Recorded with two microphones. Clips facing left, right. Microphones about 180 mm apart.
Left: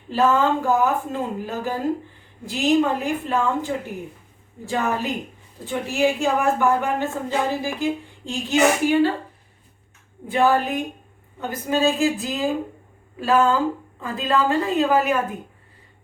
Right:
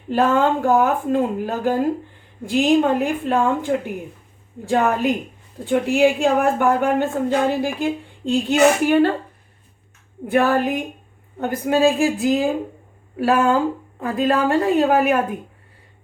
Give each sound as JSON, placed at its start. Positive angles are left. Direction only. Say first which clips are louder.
{"t": 0.1, "sound": "a woman's voice", "louder": "right 2 dB", "side_deg": -55}
{"t": 10.2, "sound": "a woman's voice", "louder": "right 2 dB", "side_deg": -60}